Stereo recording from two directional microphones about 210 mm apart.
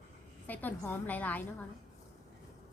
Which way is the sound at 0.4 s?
10° left (ahead or behind).